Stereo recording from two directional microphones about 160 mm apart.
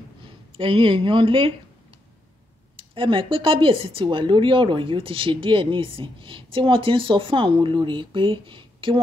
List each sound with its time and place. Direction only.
0.6 s speech: 30° right (ahead or behind)
2.8 s speech: 35° right (ahead or behind)